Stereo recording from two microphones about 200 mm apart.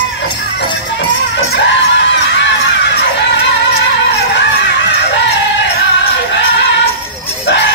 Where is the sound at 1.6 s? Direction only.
65° left (ahead or behind).